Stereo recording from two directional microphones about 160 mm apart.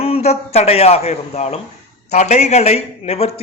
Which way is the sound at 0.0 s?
40° left (ahead or behind).